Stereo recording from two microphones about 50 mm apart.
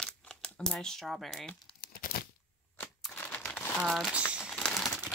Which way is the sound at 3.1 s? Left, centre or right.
Left.